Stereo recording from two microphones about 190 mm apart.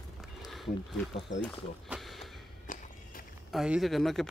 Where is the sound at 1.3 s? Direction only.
75° left (ahead or behind).